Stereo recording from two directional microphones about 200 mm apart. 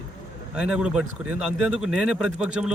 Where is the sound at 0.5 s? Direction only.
5° right (ahead or behind).